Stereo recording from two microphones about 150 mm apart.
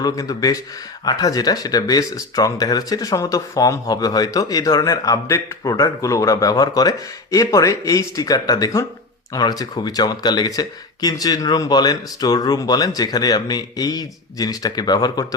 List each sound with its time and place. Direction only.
0.0 s speech: 25° left (ahead or behind)